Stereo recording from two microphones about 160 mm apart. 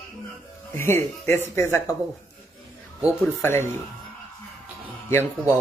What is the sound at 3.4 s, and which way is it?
Speech, 15° left (ahead or behind).